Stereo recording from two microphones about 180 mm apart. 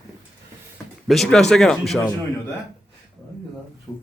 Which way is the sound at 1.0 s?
Centre (ahead or behind).